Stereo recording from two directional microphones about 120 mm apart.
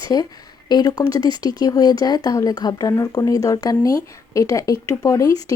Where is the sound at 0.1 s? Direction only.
30° left (ahead or behind).